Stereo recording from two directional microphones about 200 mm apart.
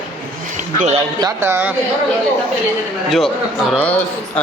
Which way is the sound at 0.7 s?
35° right (ahead or behind).